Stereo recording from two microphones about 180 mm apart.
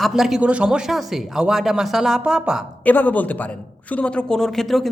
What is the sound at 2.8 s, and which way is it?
A woman's voice, 10° left (ahead or behind).